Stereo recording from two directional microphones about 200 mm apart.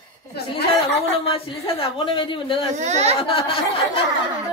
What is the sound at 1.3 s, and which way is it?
Speech, 30° left (ahead or behind).